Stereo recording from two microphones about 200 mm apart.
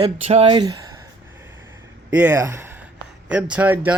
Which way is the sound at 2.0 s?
10° right (ahead or behind).